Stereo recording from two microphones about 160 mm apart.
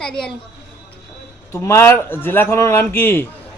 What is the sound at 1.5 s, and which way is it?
A man's voice, 15° left (ahead or behind).